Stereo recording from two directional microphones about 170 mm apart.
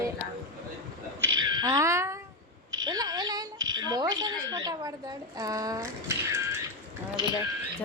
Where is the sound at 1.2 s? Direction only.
25° right (ahead or behind).